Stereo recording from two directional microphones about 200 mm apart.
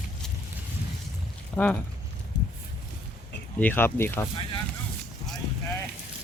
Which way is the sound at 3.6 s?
10° left (ahead or behind).